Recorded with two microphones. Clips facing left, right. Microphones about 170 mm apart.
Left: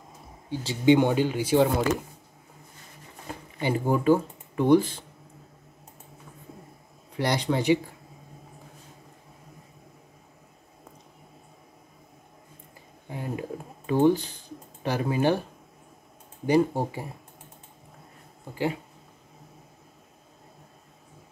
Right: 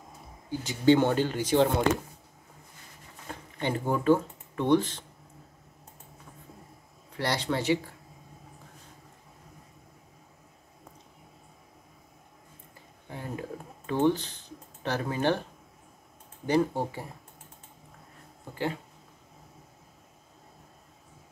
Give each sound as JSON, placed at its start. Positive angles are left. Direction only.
{"t": 0.8, "sound": "speech", "side_deg": 15}
{"t": 3.3, "sound": "speech", "side_deg": 10}
{"t": 7.2, "sound": "speech", "side_deg": 15}
{"t": 13.1, "sound": "a sound", "side_deg": 15}
{"t": 16.4, "sound": "speech", "side_deg": 10}
{"t": 18.5, "sound": "speech", "side_deg": 10}